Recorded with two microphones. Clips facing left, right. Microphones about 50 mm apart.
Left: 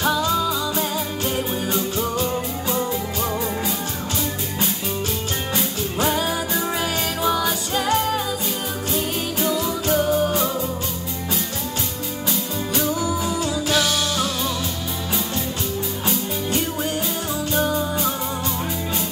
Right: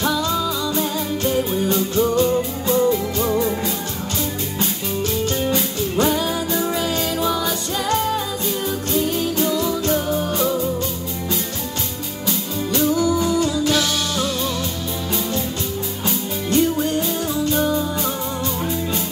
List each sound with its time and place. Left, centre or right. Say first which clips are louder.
0.0 s music: even; centre
5.5 s music: right 3 dB; centre
7.2 s music: even; centre
12.3 s music: right 3 dB; centre
16.1 s music: right 3 dB; centre